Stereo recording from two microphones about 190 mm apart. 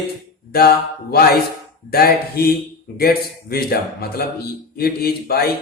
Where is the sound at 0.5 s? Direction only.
55° left (ahead or behind).